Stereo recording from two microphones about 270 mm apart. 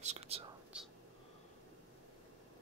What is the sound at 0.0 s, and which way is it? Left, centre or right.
Speech, right.